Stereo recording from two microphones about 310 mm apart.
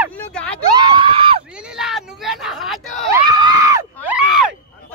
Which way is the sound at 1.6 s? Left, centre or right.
Centre.